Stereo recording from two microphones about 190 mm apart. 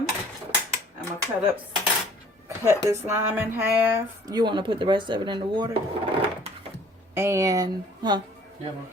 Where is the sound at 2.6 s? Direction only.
15° right (ahead or behind).